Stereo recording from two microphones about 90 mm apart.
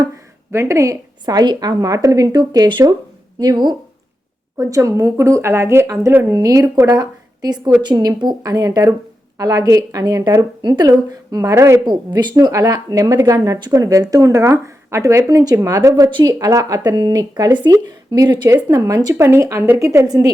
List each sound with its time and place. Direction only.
0.5 s speech: 35° right (ahead or behind)
1.2 s speech: 55° right (ahead or behind)
4.5 s speech: 35° right (ahead or behind)
11.9 s speech: 55° right (ahead or behind)
12.3 s a woman's voice: 40° right (ahead or behind)
18.4 s speech: 35° right (ahead or behind)
19.1 s speech: 30° right (ahead or behind)